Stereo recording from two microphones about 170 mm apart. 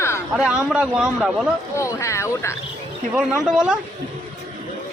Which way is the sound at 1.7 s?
15° left (ahead or behind).